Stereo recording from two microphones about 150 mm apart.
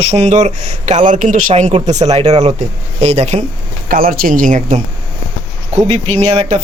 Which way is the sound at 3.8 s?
75° right (ahead or behind).